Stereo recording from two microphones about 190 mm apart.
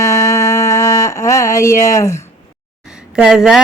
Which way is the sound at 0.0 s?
15° left (ahead or behind).